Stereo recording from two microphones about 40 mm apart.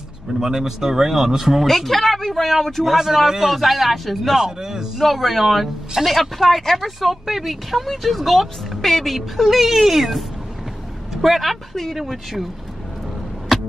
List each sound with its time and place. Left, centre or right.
0.4 s speech: centre
1.7 s a woman's voice: centre
2.8 s speech: centre
4.4 s speech: centre
5.0 s speech: centre
9.5 s a woman's voice: centre
12.0 s speech: centre
13.5 s music: centre